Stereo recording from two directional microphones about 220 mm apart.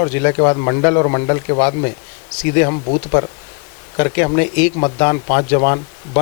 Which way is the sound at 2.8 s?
25° left (ahead or behind).